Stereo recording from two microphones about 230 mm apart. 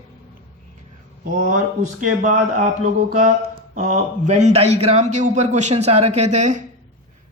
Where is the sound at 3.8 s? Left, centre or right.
Right.